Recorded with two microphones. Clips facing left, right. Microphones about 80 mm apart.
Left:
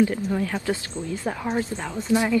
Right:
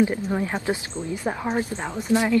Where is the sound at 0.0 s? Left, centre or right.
Right.